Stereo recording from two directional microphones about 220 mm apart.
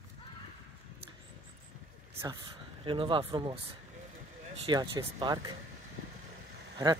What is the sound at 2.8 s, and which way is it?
Speech, 25° right (ahead or behind).